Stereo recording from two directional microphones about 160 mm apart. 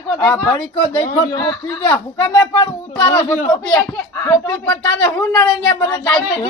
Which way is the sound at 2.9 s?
25° left (ahead or behind).